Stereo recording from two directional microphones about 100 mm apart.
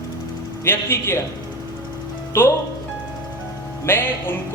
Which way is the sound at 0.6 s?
25° left (ahead or behind).